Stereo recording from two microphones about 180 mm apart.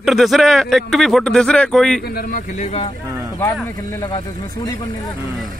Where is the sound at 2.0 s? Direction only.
55° left (ahead or behind).